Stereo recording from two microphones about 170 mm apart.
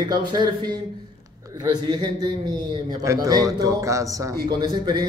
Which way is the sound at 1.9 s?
25° right (ahead or behind).